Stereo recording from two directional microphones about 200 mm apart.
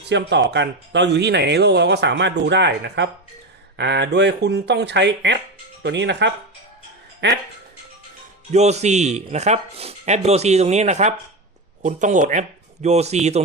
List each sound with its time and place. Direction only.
0.0 s speech: 60° right (ahead or behind)
8.5 s a man's voice: 35° right (ahead or behind)